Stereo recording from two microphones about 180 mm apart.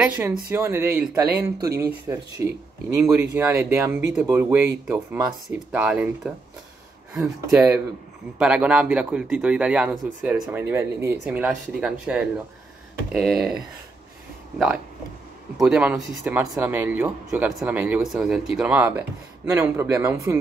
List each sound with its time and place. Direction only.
0.0 s speech: 10° right (ahead or behind)
1.7 s speech: 60° right (ahead or behind)
2.4 s speech: 15° right (ahead or behind)
15.5 s speech: 5° right (ahead or behind)